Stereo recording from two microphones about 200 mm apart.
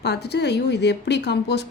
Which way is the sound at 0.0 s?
55° left (ahead or behind).